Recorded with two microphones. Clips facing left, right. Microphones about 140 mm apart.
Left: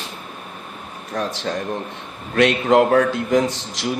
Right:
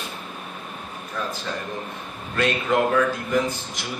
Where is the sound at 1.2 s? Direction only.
85° left.